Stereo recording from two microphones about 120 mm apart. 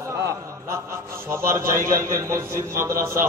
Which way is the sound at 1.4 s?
25° right (ahead or behind).